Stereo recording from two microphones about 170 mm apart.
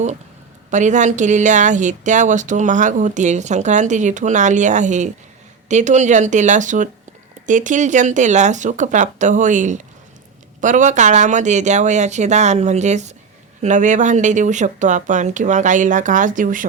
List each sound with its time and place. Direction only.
0.7 s speech: 45° right (ahead or behind)